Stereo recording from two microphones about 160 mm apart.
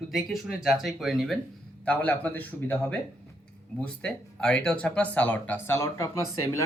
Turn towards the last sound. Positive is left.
turn(degrees=20)  # may be behind; listen again after turning